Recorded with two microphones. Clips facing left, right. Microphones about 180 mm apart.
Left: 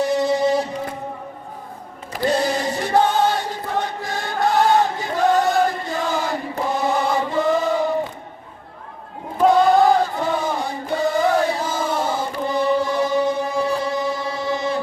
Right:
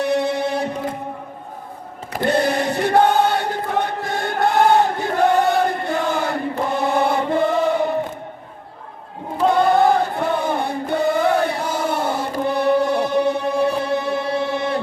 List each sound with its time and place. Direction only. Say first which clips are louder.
0.0 s a sound: left 1 dB; 60° right (ahead or behind)
2.1 s choir: right 2 dB; 60° right (ahead or behind)
9.6 s choir: even; 60° right (ahead or behind)
10.2 s chant: right 2 dB; 60° right (ahead or behind)